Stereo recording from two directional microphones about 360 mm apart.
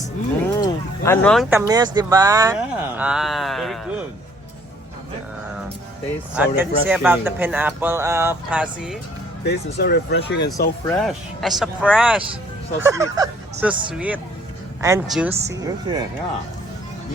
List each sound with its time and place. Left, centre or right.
0.6 s speech: centre
6.3 s speech: centre
9.4 s speech: left
10.8 s speech: centre